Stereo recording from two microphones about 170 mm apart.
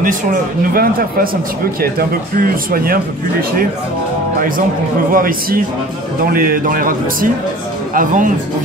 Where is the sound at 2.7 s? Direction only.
60° right (ahead or behind).